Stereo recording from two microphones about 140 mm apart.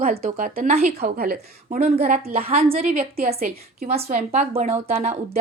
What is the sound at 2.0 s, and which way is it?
Speech, 55° right (ahead or behind).